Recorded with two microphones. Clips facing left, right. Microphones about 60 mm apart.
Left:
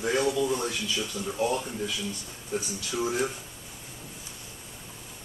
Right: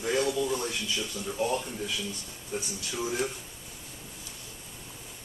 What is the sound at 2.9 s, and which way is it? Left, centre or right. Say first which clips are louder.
Speech: left 3 dB; centre.